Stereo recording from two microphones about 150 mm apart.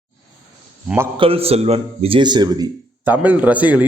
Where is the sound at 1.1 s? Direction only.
40° right (ahead or behind).